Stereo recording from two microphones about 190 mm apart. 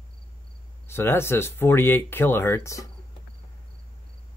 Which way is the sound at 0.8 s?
10° left (ahead or behind).